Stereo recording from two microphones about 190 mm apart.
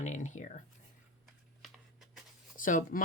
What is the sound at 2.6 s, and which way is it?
Speech, 45° left (ahead or behind).